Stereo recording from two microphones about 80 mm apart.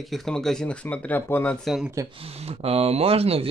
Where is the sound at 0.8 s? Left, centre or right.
Centre.